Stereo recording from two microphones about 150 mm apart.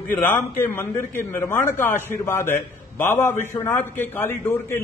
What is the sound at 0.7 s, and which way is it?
A man's voice, 15° left (ahead or behind).